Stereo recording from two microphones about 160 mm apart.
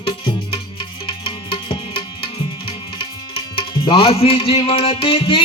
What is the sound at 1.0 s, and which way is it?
Music, 35° left (ahead or behind).